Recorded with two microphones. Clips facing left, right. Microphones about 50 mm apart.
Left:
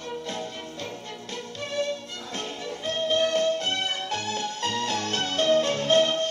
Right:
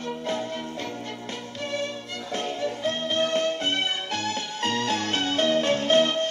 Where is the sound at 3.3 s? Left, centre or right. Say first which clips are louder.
Even; right.